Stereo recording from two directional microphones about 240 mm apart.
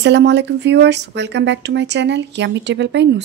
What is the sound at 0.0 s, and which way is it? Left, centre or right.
A woman's voice, right.